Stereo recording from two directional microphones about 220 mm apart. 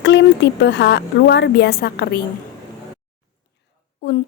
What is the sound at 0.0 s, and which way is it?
A woman's voice, 55° left (ahead or behind).